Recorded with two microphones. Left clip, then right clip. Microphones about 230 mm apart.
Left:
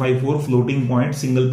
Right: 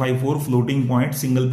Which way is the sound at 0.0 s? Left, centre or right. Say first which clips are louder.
Left 2 dB; right.